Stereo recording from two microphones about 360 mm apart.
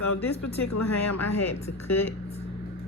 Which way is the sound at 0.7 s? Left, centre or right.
Left.